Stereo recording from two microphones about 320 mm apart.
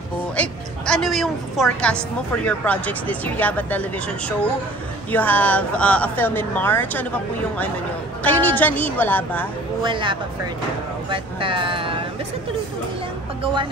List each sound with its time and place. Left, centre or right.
0.4 s a woman's voice: centre
5.1 s a woman's voice: centre
8.2 s a woman's voice: centre
9.8 s speech: centre